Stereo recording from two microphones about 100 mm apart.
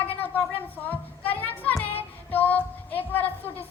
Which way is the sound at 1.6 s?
20° left (ahead or behind).